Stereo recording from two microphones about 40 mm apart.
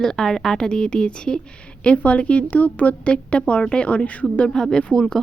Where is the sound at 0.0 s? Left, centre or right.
Centre.